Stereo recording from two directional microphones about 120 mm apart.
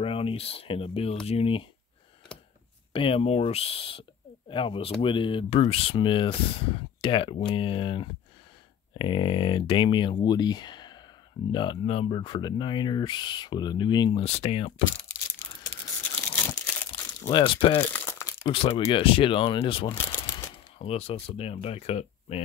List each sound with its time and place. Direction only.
0.0 s speech: 50° left (ahead or behind)
2.9 s speech: 50° left (ahead or behind)
14.2 s speech: 55° left (ahead or behind)
15.6 s tearing: 30° left (ahead or behind)
16.3 s crumpling: 15° left (ahead or behind)
17.3 s speech: 45° left (ahead or behind)
17.8 s crumpling: 15° left (ahead or behind)
18.5 s speech: 55° left (ahead or behind)